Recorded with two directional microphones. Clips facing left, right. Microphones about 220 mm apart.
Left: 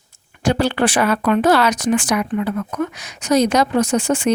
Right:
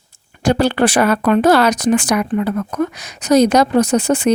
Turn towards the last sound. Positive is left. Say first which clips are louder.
# right 3 dB
turn(degrees=-35)  # may be behind; listen again after turning